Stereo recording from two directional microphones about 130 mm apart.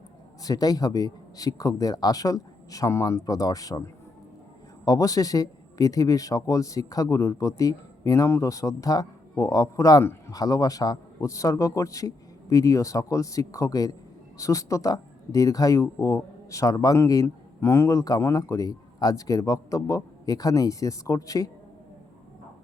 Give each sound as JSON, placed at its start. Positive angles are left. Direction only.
{"t": 0.4, "sound": "speech", "side_deg": 30}
{"t": 4.9, "sound": "speech", "side_deg": 25}